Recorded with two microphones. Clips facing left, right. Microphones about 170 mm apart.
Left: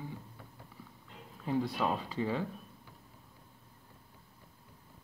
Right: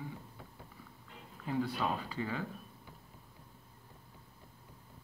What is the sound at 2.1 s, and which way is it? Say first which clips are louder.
Speech: left 4 dB; 25° left (ahead or behind).